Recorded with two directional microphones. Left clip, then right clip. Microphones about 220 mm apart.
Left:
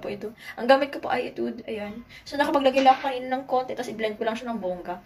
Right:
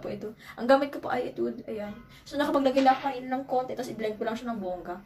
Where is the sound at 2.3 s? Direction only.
5° right (ahead or behind).